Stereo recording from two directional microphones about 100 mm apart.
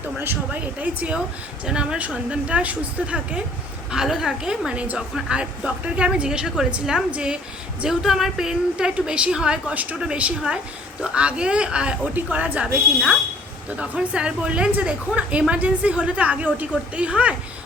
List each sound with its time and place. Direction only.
0.2 s a woman's voice: 20° right (ahead or behind)
13.7 s a woman's voice: 15° right (ahead or behind)